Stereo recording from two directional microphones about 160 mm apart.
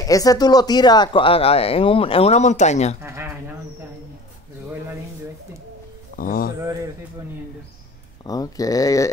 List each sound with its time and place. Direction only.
0.0 s speech: 20° left (ahead or behind); by 3.0 s 45° left (ahead or behind)
3.0 s bird: 15° right (ahead or behind)
6.1 s speech: 60° left (ahead or behind)
8.3 s speech: 25° left (ahead or behind)